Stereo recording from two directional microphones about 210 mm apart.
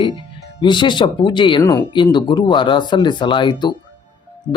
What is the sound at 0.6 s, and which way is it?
Speech, 20° left (ahead or behind).